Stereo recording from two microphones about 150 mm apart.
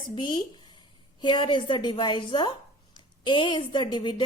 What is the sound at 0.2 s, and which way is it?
A woman's voice, 30° left (ahead or behind).